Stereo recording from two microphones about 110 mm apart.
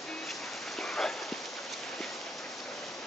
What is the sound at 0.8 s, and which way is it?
Rain on surface, 5° left (ahead or behind).